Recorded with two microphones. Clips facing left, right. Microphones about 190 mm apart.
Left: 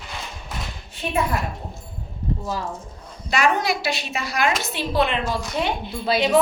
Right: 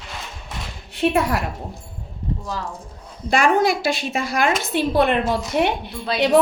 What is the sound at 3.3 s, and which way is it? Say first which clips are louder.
A woman's voice: right 4 dB; 50° right (ahead or behind).